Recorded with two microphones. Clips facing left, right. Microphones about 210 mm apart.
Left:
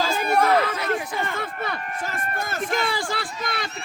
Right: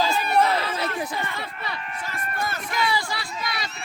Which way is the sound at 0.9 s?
50° left (ahead or behind).